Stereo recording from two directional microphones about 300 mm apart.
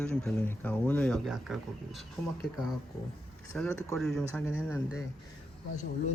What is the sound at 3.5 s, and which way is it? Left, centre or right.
Speech, centre.